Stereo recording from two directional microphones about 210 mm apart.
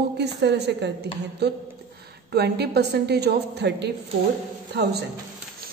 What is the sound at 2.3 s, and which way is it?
A woman's voice, 50° right (ahead or behind).